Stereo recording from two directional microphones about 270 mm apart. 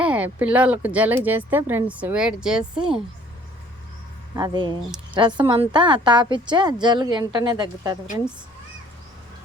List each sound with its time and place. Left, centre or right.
0.0 s speech: centre
4.4 s a woman's voice: centre